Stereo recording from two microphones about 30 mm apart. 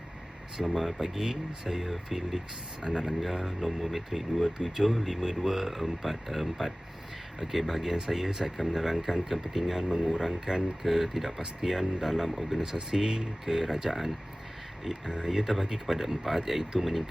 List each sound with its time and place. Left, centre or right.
0.5 s speech: centre
2.8 s speech: right
3.1 s speech: centre
4.4 s speech: centre
5.4 s speech: centre
10.8 s speech: centre
14.9 s speech: centre
15.2 s speech: centre